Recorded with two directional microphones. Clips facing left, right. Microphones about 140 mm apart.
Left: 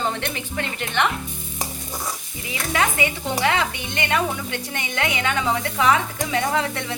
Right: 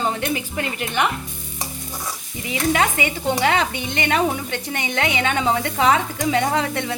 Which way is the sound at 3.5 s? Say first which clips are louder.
Right 2 dB; 25° right (ahead or behind).